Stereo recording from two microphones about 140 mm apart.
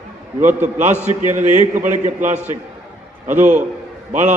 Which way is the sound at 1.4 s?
60° right (ahead or behind).